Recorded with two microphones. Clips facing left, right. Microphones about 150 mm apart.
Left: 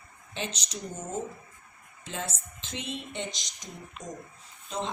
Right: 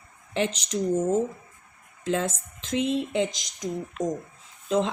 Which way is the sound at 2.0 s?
90° right.